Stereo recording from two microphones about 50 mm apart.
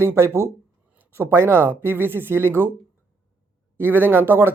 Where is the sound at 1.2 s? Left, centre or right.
Right.